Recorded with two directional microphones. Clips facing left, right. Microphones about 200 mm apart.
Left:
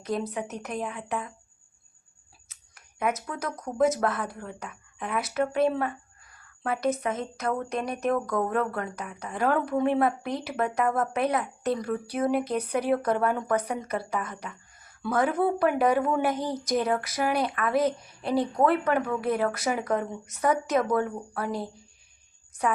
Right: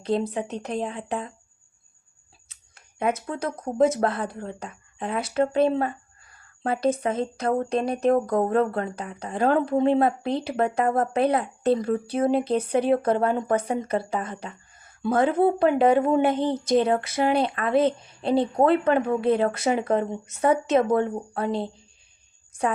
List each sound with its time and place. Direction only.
0.0 s speech: 30° right (ahead or behind)
2.5 s speech: 30° right (ahead or behind)